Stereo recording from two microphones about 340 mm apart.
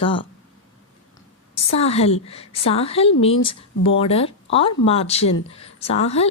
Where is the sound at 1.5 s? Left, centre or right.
Centre.